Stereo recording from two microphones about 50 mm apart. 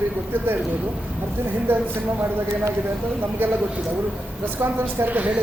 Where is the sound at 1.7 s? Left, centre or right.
Right.